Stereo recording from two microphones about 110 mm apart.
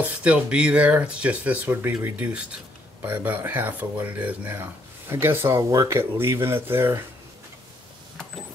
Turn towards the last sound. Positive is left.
turn(degrees=-20)  # may be behind; listen again after turning